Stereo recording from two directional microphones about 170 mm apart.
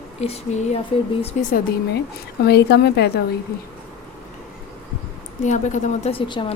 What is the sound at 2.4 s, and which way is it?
Speech, 75° left (ahead or behind).